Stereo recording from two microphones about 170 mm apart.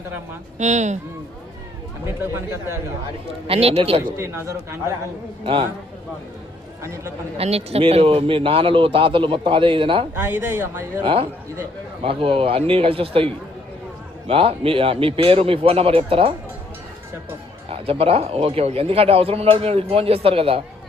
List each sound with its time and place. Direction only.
0.6 s speech: 45° right (ahead or behind)
2.0 s a man's voice: 15° right (ahead or behind)
3.4 s a man's voice: 35° right (ahead or behind)
4.2 s a man's voice: 15° right (ahead or behind)
5.4 s a man's voice: 30° right (ahead or behind)
6.8 s a man's voice: 15° right (ahead or behind)
7.3 s a man's voice: 35° right (ahead or behind)
10.2 s a man's voice: 10° right (ahead or behind)
11.0 s a man's voice: 30° right (ahead or behind)
17.7 s a man's voice: 35° right (ahead or behind)